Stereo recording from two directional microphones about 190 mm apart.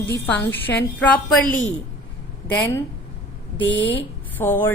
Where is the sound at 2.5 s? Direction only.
10° left (ahead or behind).